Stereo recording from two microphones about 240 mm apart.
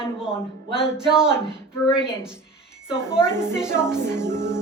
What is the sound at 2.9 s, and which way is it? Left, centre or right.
A woman's voice, centre.